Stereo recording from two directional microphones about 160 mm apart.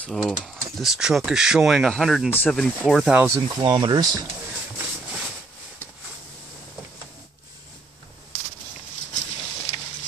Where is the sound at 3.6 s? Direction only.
30° right (ahead or behind).